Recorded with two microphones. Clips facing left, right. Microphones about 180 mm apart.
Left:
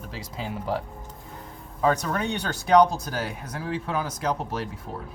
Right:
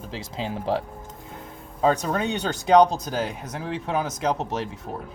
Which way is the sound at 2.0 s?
20° right (ahead or behind).